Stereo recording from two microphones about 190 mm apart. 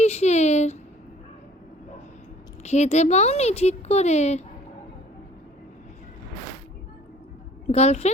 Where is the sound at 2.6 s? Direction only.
35° left (ahead or behind).